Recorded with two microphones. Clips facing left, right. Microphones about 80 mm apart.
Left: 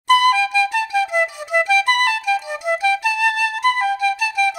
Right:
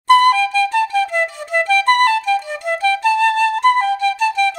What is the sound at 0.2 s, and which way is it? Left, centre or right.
Flute, centre.